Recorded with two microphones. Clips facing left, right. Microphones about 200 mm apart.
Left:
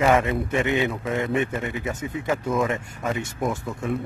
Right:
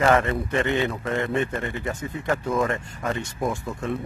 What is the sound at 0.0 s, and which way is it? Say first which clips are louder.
Speech: even; 5° left (ahead or behind).